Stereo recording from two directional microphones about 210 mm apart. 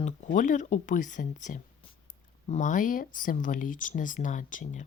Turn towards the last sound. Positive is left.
turn(degrees=40)  # may be behind; listen again after turning